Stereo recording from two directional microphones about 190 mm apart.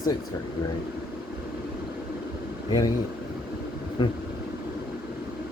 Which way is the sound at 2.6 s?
20° left (ahead or behind).